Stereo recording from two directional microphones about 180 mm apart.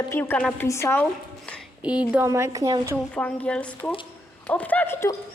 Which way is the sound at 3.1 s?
5° left (ahead or behind).